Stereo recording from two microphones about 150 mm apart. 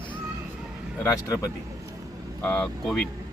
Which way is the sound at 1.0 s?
20° left (ahead or behind).